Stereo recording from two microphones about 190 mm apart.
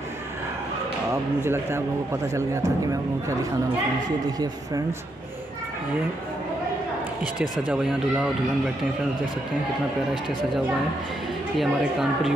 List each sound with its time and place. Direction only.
1.4 s speech: 10° right (ahead or behind)
7.3 s speech: 5° right (ahead or behind)
11.5 s speech: centre (ahead or behind)